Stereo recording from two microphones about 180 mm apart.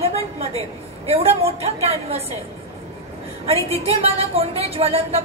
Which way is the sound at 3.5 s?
35° right (ahead or behind).